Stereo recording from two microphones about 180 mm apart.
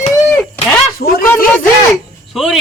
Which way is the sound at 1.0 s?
55° left (ahead or behind).